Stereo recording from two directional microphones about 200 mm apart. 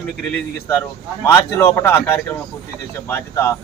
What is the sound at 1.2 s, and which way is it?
Speech, 15° left (ahead or behind).